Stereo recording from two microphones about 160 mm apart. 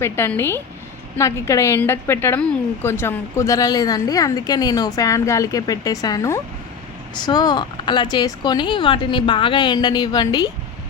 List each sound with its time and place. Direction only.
0.0 s a woman's voice: 15° left (ahead or behind)